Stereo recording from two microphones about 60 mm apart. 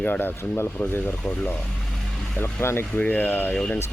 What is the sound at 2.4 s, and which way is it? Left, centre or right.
Speech, left.